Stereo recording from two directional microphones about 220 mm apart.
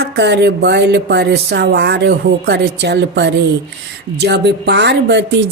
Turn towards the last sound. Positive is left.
turn(degrees=-50)  # may be behind; listen again after turning